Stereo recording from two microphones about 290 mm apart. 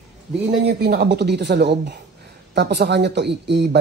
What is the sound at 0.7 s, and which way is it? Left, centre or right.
Speech, right.